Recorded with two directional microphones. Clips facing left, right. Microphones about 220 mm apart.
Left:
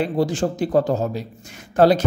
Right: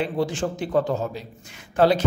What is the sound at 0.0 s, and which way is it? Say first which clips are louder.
A man's voice: left 4 dB; 40° left (ahead or behind).